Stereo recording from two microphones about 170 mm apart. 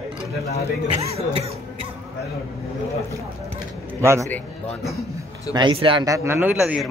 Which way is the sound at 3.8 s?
15° right (ahead or behind).